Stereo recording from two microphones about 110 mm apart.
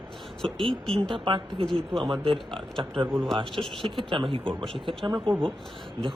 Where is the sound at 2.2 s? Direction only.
50° right (ahead or behind).